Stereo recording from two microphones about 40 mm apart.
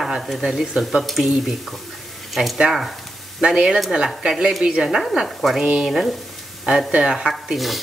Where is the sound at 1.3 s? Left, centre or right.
Centre.